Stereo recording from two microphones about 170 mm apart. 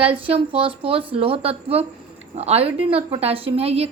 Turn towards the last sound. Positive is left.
turn(degrees=-35)  # may be behind; listen again after turning